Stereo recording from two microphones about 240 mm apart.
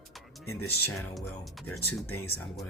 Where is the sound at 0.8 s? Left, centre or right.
Centre.